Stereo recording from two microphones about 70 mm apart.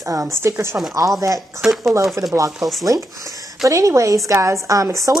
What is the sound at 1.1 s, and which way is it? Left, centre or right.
Speech, right.